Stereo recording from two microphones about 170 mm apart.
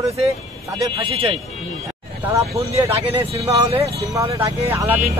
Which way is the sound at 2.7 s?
35° right (ahead or behind).